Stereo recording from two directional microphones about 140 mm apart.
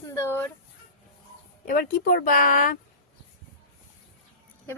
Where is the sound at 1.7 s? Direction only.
85° left.